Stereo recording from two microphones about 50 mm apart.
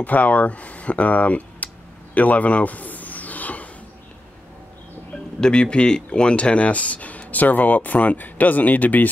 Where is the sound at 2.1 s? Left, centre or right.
Left.